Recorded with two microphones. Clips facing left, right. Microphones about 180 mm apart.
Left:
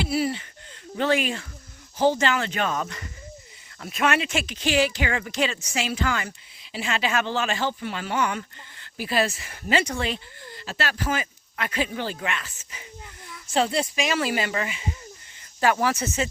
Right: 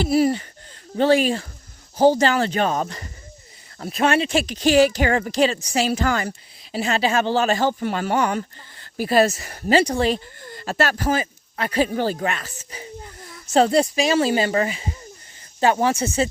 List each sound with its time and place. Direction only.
0.0 s speech: 40° right (ahead or behind)
15.6 s speech: 25° right (ahead or behind)